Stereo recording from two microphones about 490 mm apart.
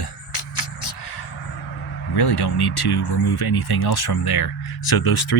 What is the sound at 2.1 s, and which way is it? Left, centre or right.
Speech, left.